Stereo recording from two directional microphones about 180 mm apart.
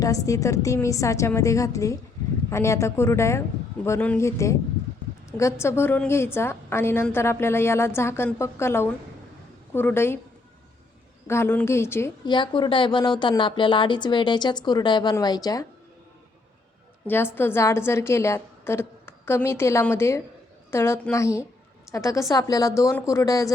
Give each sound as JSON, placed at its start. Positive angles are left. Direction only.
{"t": 0.0, "sound": "a woman's voice", "side_deg": 20}
{"t": 11.3, "sound": "a woman's voice", "side_deg": 15}
{"t": 12.3, "sound": "speech", "side_deg": 25}
{"t": 17.1, "sound": "a woman's voice", "side_deg": 10}